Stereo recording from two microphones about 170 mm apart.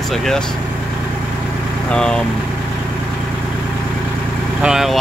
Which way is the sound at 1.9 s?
5° left (ahead or behind).